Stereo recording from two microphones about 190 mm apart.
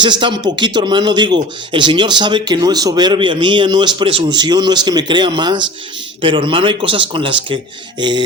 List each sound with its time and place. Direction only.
0.0 s speech: 25° right (ahead or behind)